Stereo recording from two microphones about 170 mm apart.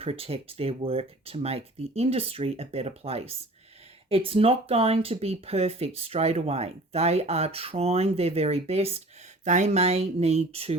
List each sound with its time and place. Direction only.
0.0 s speech: 35° right (ahead or behind)